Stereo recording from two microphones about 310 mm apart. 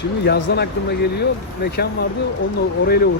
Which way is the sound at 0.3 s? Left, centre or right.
Left.